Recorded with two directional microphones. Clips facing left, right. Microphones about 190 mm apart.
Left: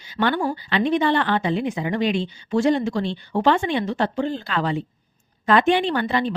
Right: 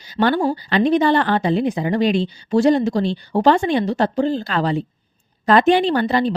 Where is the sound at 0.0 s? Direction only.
40° right (ahead or behind).